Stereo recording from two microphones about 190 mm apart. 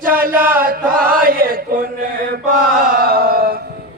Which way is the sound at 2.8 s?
50° right (ahead or behind).